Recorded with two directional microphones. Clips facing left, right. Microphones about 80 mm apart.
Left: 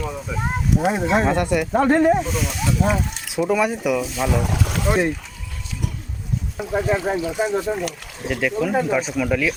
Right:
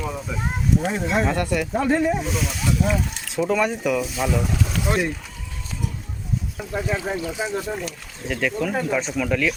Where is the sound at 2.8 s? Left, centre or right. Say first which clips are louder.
Left 3 dB; left.